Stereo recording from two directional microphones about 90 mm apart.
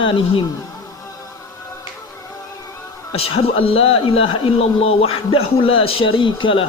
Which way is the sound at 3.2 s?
90° left.